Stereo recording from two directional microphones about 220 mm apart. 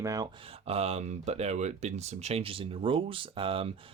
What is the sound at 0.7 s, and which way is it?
Speech, 30° right (ahead or behind).